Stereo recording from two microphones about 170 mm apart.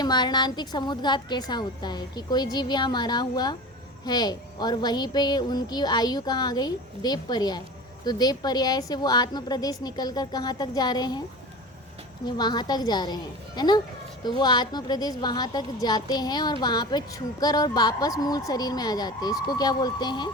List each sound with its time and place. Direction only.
0.0 s a woman's voice: 25° left (ahead or behind)
12.2 s a woman's voice: 25° left (ahead or behind)